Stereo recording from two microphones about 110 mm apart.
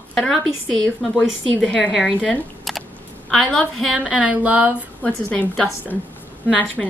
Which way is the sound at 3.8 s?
10° right (ahead or behind).